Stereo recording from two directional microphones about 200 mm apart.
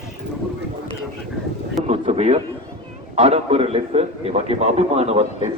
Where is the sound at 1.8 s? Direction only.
35° right (ahead or behind).